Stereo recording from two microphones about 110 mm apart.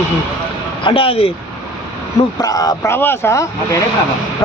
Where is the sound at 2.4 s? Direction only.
35° left (ahead or behind).